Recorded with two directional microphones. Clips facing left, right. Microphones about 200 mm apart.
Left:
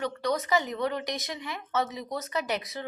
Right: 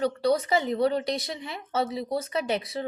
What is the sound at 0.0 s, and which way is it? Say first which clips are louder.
Speech: right 5 dB; 30° right (ahead or behind).